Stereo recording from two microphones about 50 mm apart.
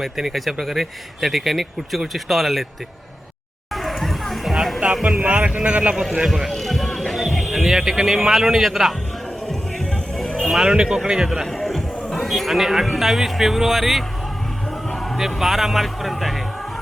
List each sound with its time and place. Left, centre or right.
0.0 s a man's voice: centre
3.7 s chatter: centre
4.5 s music: centre
5.2 s speech: right
6.2 s a man's voice: centre
6.5 s music: centre
9.5 s music: centre
10.4 s music: centre
10.7 s speech: centre
11.4 s music: centre
12.2 s a man's voice: centre